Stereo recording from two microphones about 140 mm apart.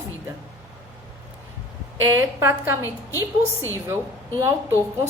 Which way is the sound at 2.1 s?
20° right (ahead or behind).